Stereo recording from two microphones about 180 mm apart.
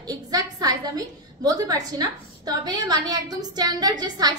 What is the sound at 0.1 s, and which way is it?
A woman's voice, 20° right (ahead or behind).